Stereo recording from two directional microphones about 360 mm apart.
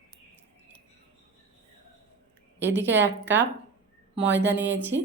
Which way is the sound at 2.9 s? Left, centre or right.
Right.